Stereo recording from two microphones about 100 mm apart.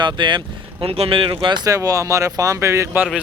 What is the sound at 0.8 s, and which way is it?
Speech, 70° right (ahead or behind).